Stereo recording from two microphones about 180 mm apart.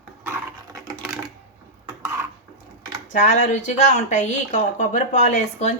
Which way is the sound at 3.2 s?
40° left (ahead or behind).